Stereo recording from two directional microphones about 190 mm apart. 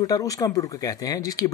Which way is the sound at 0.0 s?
20° left (ahead or behind).